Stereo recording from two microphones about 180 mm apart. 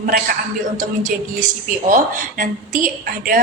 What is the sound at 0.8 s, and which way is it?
A woman's voice, 45° right (ahead or behind).